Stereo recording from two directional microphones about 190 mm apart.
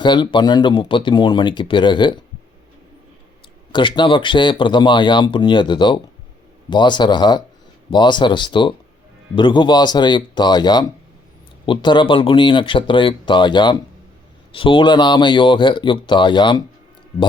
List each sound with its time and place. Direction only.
0.0 s speech: 25° left (ahead or behind)
3.7 s speech: 25° left (ahead or behind)